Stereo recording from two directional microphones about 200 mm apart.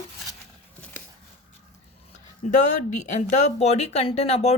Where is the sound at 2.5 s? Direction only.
35° left (ahead or behind).